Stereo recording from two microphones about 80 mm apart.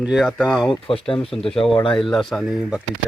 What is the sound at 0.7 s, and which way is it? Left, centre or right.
Speech, left.